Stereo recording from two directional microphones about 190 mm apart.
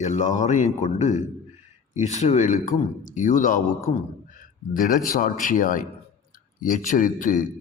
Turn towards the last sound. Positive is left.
turn(degrees=45)  # may be behind; listen again after turning